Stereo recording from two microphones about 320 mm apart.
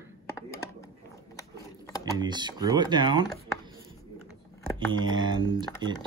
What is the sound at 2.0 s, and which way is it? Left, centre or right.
Speech, centre.